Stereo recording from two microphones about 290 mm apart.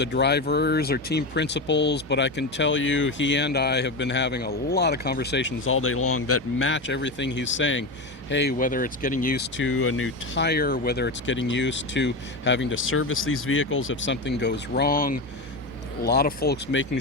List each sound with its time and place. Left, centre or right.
0.0 s speech: left